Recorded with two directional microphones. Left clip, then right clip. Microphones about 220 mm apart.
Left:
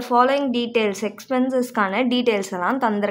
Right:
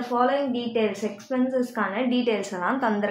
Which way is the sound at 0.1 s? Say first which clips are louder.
Left 6 dB; 30° left (ahead or behind).